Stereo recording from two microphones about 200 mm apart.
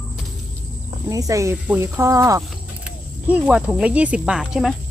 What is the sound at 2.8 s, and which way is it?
Speech, 5° right (ahead or behind).